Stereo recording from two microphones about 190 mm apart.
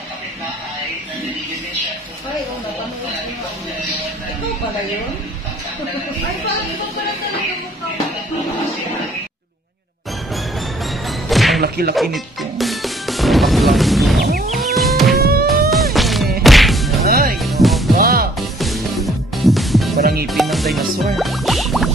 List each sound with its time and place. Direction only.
11.2 s music: centre (ahead or behind)
15.1 s music: 55° right (ahead or behind)
15.7 s whack: centre (ahead or behind)
17.0 s music: 50° right (ahead or behind)
17.4 s music: centre (ahead or behind)
17.9 s music: 50° right (ahead or behind)
18.6 s music: centre (ahead or behind)
20.0 s music: 55° right (ahead or behind)
20.2 s music: centre (ahead or behind)